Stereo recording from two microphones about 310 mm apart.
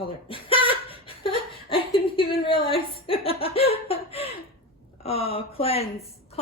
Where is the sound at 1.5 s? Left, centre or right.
Centre.